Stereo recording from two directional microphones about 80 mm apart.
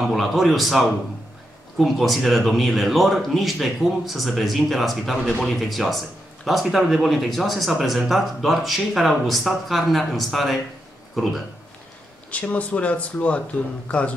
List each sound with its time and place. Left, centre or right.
0.1 s speech: centre
12.3 s speech: centre